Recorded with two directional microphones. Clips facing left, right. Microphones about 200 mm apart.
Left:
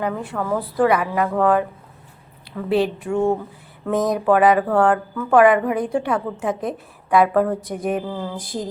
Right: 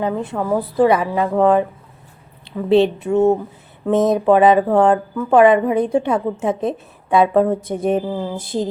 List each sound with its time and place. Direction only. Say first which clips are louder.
0.0 s speech: right 3 dB; 20° right (ahead or behind)
2.6 s speech: right 6 dB; 25° right (ahead or behind)